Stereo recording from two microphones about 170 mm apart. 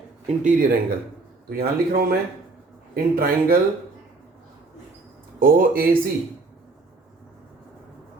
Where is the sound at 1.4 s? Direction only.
60° right (ahead or behind).